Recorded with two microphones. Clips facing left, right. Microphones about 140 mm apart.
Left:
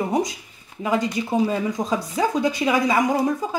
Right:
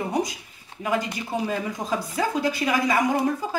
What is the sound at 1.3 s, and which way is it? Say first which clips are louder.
Speech: left 4 dB; 25° left (ahead or behind).